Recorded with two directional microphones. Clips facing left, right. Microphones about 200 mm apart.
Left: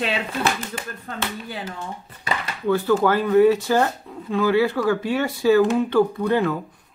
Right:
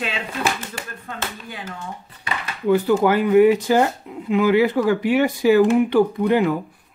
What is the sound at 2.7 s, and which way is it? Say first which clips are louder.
Speech: right 2 dB; 15° right (ahead or behind).